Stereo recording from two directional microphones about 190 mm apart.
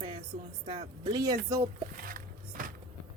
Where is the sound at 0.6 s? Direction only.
30° right (ahead or behind).